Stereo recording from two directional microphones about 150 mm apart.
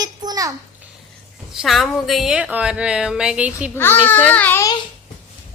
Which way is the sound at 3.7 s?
15° left (ahead or behind).